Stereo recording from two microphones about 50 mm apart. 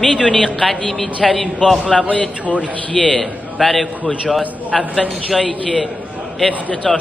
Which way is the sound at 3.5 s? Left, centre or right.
Centre.